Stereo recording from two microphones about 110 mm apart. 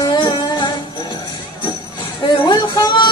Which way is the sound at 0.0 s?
45° left (ahead or behind).